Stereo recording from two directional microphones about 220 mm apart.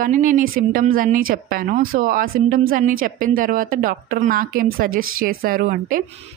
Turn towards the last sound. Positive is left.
turn(degrees=-40)  # may be behind; listen again after turning